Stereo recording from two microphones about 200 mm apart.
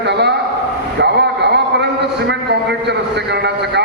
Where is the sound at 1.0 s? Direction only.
55° right (ahead or behind).